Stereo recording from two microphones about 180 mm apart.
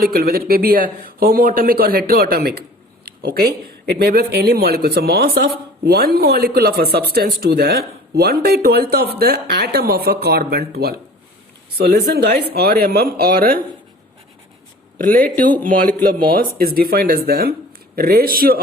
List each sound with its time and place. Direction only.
0.0 s speech: 55° right (ahead or behind)
14.9 s speech: 50° right (ahead or behind)